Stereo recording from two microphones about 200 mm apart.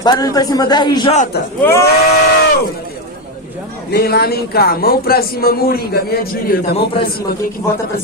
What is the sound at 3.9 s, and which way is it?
Speech, 50° left (ahead or behind).